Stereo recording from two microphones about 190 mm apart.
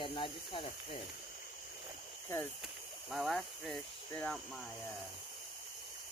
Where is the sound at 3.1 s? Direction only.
Centre (ahead or behind).